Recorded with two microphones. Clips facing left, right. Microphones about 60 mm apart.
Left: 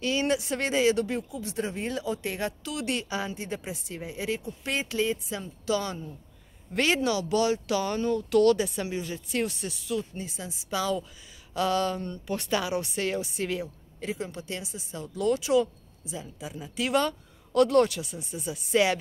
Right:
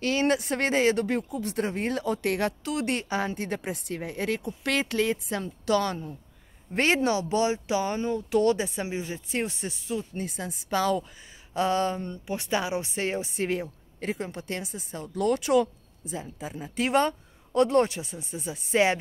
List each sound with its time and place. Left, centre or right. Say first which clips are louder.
0.0 s a woman's voice: right 2 dB; right
2.6 s a woman's voice: right 3 dB; right
6.7 s speech: right 2 dB; right
10.1 s a woman's voice: right 4 dB; right
11.5 s speech: right 1 dB; right